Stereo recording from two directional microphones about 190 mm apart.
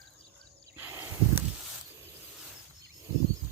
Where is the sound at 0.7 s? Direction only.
10° right (ahead or behind).